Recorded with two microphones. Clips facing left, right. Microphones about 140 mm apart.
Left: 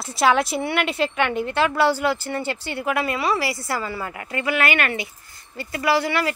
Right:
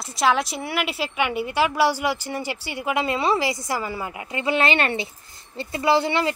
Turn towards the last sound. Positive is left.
turn(degrees=-25)  # may be behind; listen again after turning